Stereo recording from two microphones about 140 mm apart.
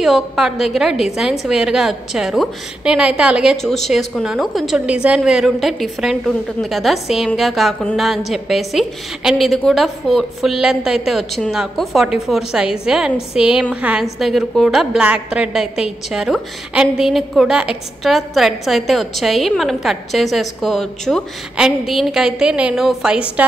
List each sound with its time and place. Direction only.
0.0 s a woman's voice: 5° right (ahead or behind)